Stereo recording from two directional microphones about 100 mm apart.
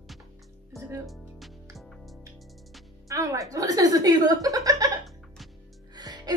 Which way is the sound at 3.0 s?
35° right (ahead or behind).